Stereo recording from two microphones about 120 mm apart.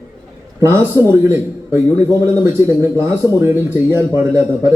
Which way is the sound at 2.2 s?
25° right (ahead or behind).